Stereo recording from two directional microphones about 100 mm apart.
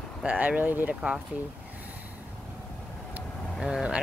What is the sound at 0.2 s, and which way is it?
Speech, 15° right (ahead or behind).